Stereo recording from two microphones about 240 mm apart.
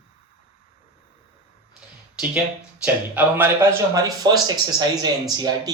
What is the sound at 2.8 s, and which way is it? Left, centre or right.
Speech, centre.